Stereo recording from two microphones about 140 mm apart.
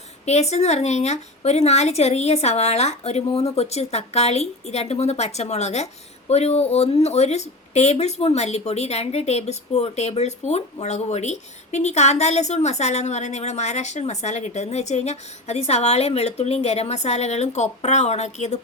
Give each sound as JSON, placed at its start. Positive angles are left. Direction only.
{"t": 0.3, "sound": "a woman's voice", "side_deg": 50}